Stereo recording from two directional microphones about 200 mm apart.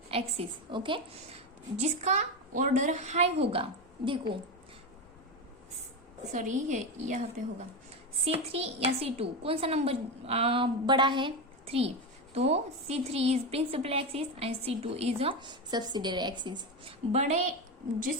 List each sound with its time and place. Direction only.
0.1 s a woman's voice: 30° right (ahead or behind)
6.3 s a woman's voice: 40° right (ahead or behind)
8.2 s a woman's voice: 30° right (ahead or behind)
17.1 s a woman's voice: 35° right (ahead or behind)